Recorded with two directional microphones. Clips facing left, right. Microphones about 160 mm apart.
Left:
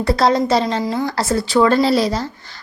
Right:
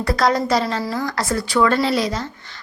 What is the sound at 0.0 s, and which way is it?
A woman's voice, 25° left (ahead or behind).